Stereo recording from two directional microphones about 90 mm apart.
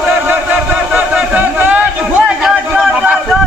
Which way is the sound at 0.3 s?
20° right (ahead or behind).